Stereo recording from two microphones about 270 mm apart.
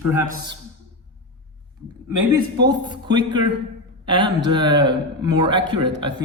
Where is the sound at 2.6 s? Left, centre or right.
Centre.